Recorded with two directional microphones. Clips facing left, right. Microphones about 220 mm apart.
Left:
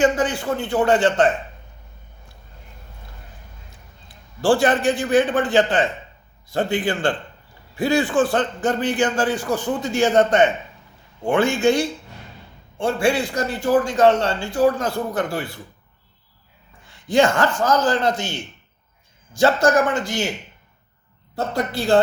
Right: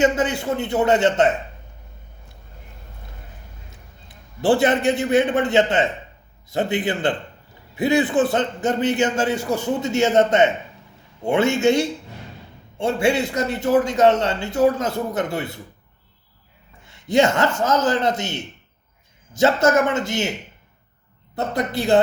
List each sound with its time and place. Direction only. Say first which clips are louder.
0.0 s a man's voice: even; 25° right (ahead or behind)
3.7 s a man's voice: right 1 dB; 20° right (ahead or behind)
16.8 s a man's voice: even; 25° right (ahead or behind)
21.3 s a man's voice: even; 20° right (ahead or behind)